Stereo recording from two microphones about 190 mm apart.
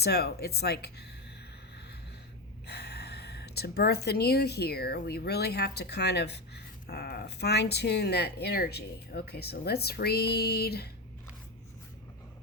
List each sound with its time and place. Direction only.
0.0 s speech: 55° left (ahead or behind)
2.6 s speech: 60° left (ahead or behind)